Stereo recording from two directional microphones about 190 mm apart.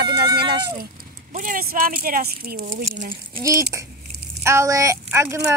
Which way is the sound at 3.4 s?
15° right (ahead or behind).